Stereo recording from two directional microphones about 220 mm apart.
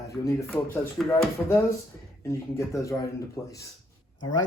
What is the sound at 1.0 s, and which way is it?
Speech, centre (ahead or behind).